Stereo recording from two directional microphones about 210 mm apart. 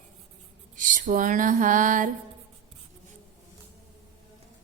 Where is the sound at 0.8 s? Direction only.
40° right (ahead or behind).